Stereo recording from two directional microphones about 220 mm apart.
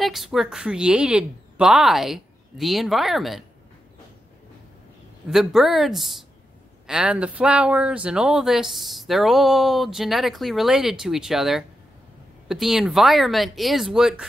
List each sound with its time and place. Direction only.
0.0 s speech: centre (ahead or behind)
5.3 s speech: centre (ahead or behind)